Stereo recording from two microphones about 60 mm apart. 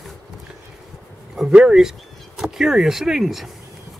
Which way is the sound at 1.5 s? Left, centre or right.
Centre.